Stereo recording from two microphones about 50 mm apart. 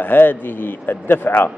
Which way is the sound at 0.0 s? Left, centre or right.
Left.